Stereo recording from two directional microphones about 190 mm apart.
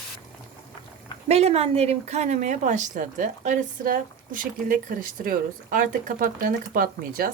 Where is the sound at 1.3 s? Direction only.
35° right (ahead or behind).